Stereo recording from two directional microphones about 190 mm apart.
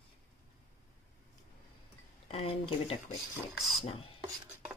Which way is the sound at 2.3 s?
30° left (ahead or behind).